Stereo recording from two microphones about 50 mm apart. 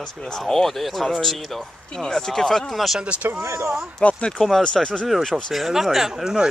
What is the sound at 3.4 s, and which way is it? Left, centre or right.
Speech, right.